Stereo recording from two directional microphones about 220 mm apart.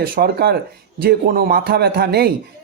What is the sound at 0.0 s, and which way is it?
Speech, 45° right (ahead or behind).